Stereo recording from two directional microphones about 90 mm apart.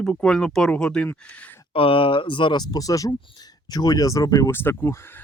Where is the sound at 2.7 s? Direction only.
40° left (ahead or behind).